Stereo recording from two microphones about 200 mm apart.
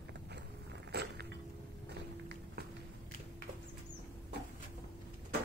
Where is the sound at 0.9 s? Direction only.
55° right (ahead or behind).